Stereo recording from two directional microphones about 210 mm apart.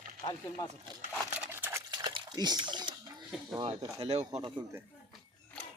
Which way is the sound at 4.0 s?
30° right (ahead or behind).